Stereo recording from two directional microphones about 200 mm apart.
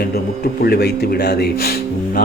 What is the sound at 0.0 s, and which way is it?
A man's voice, 50° left (ahead or behind).